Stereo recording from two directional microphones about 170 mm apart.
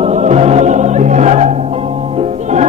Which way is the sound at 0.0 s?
40° right (ahead or behind).